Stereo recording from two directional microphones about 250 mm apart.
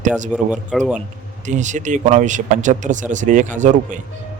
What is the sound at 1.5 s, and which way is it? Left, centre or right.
Speech, right.